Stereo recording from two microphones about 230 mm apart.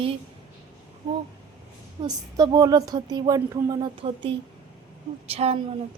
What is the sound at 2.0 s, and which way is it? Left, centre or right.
A woman's voice, centre.